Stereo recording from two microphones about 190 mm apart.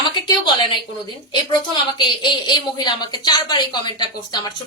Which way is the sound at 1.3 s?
25° left (ahead or behind).